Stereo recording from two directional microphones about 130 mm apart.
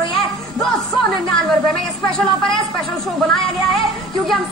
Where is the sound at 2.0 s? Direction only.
5° left (ahead or behind).